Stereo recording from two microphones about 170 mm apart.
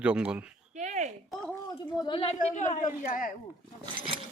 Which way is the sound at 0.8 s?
45° right (ahead or behind).